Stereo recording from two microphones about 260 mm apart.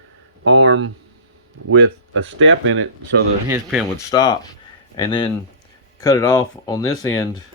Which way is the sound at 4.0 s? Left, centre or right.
Centre.